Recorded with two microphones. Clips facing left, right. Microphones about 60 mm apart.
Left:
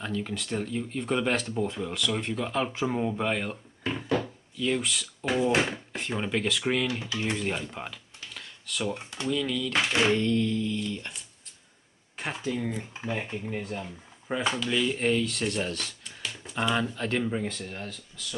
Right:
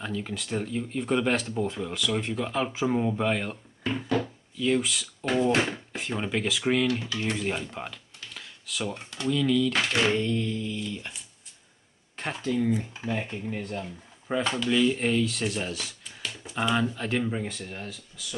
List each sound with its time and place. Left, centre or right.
0.0 s speech: centre
8.9 s speech: centre
9.3 s speech: centre
10.1 s a sound: centre
12.2 s speech: centre